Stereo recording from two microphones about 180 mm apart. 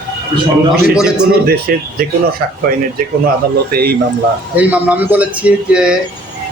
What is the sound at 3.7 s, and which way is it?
Speech, 55° right (ahead or behind).